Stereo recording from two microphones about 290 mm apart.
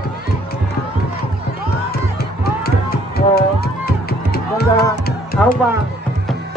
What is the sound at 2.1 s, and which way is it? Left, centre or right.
Music, left.